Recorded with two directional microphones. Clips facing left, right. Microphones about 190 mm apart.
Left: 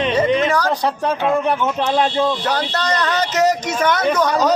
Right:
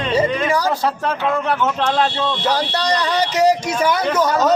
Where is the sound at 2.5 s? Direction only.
10° right (ahead or behind).